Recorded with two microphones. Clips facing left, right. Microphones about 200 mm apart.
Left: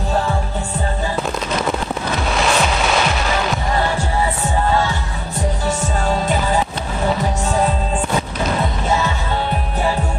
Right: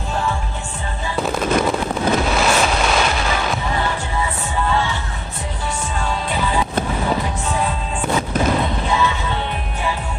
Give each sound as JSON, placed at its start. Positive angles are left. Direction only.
{"t": 4.6, "sound": "music", "side_deg": 40}
{"t": 8.8, "sound": "music", "side_deg": 40}